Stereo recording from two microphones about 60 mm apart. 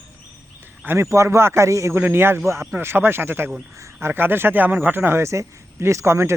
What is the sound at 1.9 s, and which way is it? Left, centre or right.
Speech, right.